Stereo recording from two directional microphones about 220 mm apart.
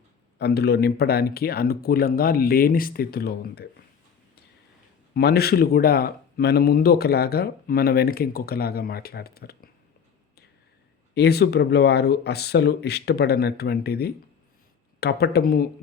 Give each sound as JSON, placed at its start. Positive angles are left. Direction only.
{"t": 0.3, "sound": "speech", "side_deg": 45}
{"t": 5.1, "sound": "speech", "side_deg": 45}
{"t": 11.1, "sound": "speech", "side_deg": 45}